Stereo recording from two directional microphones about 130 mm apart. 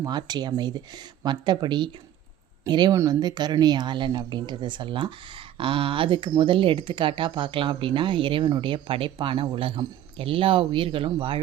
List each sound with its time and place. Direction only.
0.0 s speech: 35° right (ahead or behind)